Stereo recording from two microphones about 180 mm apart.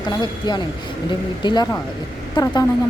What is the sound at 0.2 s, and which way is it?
Speech, 25° left (ahead or behind).